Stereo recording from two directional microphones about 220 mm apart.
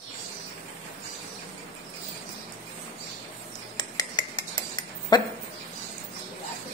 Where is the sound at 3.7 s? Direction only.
20° left (ahead or behind).